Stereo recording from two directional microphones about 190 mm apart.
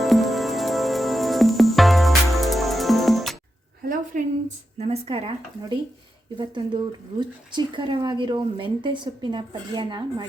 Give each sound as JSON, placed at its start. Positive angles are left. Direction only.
{"t": 0.0, "sound": "music", "side_deg": 0}
{"t": 3.8, "sound": "speech", "side_deg": -40}